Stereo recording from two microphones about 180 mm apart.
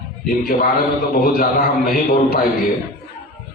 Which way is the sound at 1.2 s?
55° left (ahead or behind).